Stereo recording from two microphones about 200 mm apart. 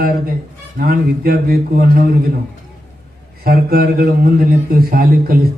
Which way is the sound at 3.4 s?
50° right (ahead or behind).